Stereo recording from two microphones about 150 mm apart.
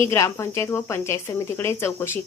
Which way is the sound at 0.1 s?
20° left (ahead or behind).